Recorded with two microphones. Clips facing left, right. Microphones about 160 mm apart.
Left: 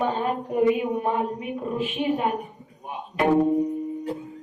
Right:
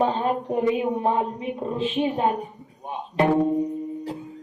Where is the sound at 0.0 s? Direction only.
30° right (ahead or behind).